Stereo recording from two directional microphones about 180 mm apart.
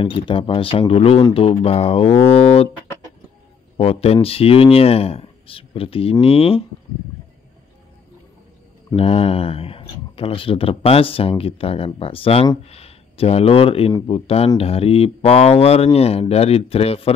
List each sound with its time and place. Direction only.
0.0 s speech: 30° left (ahead or behind)
3.7 s speech: 35° left (ahead or behind)
8.9 s speech: 35° left (ahead or behind)